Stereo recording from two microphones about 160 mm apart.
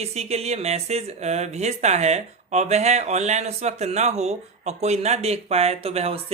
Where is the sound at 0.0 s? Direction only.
40° right (ahead or behind).